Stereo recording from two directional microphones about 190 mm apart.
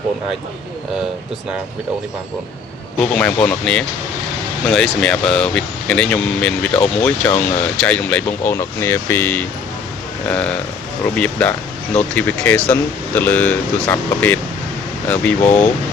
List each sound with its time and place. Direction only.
3.0 s speech: 5° left (ahead or behind)
15.4 s speech: 40° left (ahead or behind)